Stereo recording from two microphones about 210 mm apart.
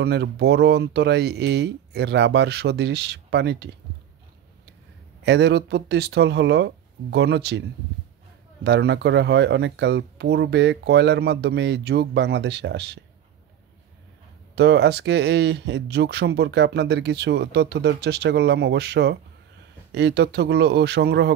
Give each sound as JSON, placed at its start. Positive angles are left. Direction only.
{"t": 0.0, "sound": "speech", "side_deg": -50}
{"t": 5.2, "sound": "speech", "side_deg": -55}
{"t": 8.6, "sound": "speech", "side_deg": -55}
{"t": 14.5, "sound": "speech", "side_deg": -55}